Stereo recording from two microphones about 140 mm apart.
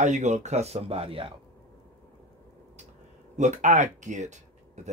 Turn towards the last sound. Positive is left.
turn(degrees=-60)  # may be behind; listen again after turning